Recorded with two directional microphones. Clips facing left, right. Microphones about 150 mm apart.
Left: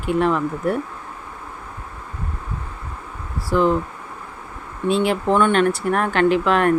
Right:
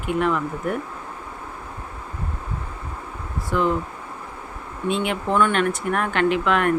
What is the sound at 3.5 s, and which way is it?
Speech, 35° left (ahead or behind).